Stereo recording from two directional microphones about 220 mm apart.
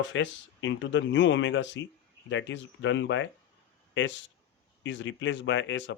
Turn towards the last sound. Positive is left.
turn(degrees=55)  # may be behind; listen again after turning